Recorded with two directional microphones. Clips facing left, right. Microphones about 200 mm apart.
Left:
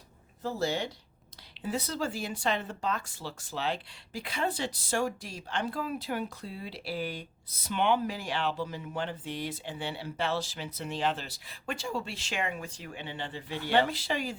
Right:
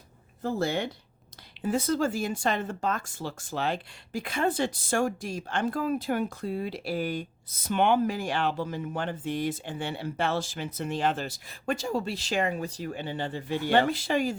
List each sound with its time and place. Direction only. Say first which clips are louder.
0.4 s speech: right 3 dB; 55° right (ahead or behind)